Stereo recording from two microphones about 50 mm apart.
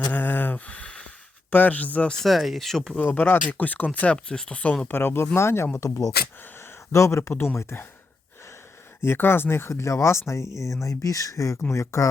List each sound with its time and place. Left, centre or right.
0.1 s a sound: left
1.5 s speech: left
2.2 s speech: centre
3.0 s speech: left
4.9 s speech: left
6.6 s a sound: left
7.2 s speech: left
7.5 s speech: left
9.0 s speech: left